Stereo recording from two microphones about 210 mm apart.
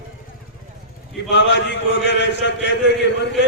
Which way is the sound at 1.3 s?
55° left (ahead or behind).